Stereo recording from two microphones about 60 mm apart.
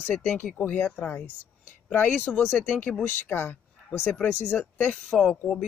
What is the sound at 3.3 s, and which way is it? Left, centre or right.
Speech, left.